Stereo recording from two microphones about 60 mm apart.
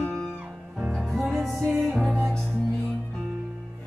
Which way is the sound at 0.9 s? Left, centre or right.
Centre.